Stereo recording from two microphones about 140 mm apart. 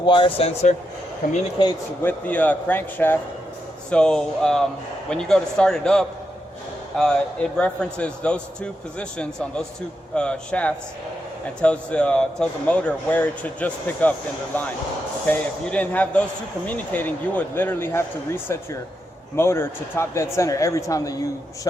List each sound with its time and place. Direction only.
0.0 s speech: 35° left (ahead or behind)
2.0 s a man's voice: 10° left (ahead or behind)
15.3 s a man's voice: 10° left (ahead or behind)